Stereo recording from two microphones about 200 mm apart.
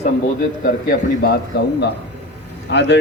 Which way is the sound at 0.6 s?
45° left (ahead or behind).